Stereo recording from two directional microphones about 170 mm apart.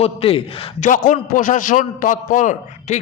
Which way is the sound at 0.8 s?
50° left (ahead or behind).